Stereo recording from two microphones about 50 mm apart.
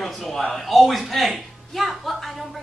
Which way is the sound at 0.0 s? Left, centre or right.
Centre.